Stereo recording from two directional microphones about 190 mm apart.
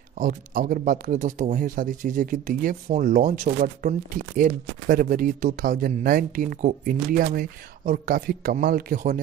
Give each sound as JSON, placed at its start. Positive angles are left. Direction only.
{"t": 0.2, "sound": "speech", "side_deg": -45}